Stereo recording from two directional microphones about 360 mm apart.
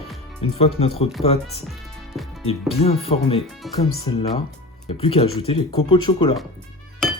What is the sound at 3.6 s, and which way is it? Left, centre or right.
Speech, centre.